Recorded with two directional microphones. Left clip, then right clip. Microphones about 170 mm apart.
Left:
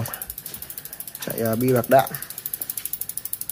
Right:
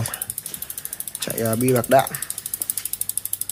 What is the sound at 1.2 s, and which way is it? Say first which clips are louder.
Mechanisms: right 1 dB; 10° right (ahead or behind).